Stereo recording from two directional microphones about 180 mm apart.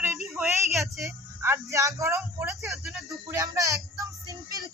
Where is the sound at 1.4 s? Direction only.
15° right (ahead or behind).